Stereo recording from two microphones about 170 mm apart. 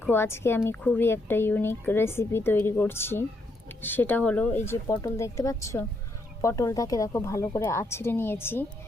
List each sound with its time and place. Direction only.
0.0 s speech: 15° left (ahead or behind)